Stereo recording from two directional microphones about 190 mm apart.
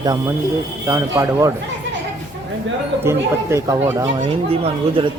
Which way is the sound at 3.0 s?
15° right (ahead or behind).